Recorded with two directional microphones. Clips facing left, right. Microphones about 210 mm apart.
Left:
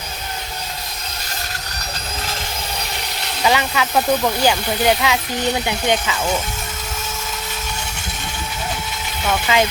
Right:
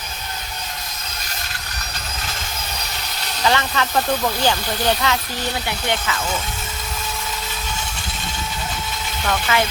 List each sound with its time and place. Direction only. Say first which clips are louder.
3.4 s speech: left 2 dB; 15° left (ahead or behind)
9.2 s speech: left 3 dB; 15° left (ahead or behind)